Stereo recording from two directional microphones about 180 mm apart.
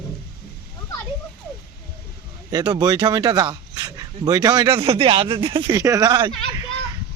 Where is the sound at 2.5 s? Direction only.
20° right (ahead or behind).